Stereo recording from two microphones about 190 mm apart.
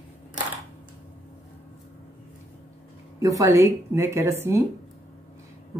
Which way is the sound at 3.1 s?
15° right (ahead or behind).